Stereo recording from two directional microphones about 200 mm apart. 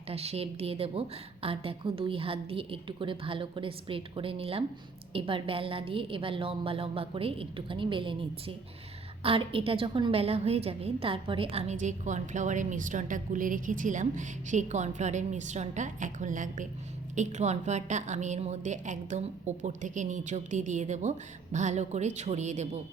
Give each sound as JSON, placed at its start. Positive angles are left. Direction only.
{"t": 0.1, "sound": "a woman's voice", "side_deg": -30}